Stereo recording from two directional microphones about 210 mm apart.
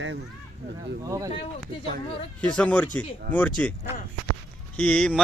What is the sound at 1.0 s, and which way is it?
Speech, 15° right (ahead or behind).